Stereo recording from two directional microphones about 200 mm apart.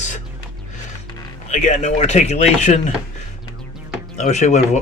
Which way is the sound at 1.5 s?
35° left (ahead or behind).